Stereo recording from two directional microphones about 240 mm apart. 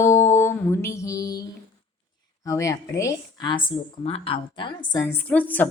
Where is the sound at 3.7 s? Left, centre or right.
Left.